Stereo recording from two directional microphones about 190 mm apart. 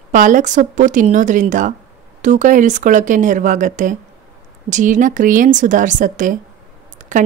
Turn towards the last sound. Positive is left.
turn(degrees=-40)  # may be behind; listen again after turning